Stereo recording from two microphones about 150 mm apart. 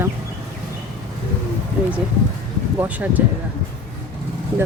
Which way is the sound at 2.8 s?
10° right (ahead or behind).